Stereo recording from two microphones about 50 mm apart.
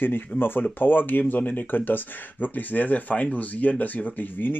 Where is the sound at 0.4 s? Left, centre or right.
Left.